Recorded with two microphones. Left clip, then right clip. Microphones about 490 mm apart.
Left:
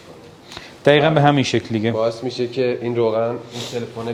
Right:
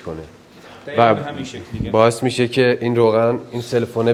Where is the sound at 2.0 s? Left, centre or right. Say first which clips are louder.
Right 6 dB; right.